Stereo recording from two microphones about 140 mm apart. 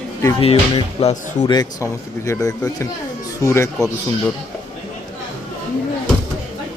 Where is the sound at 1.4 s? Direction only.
30° left (ahead or behind).